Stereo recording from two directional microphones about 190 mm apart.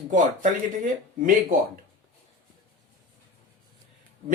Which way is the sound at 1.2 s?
45° right (ahead or behind).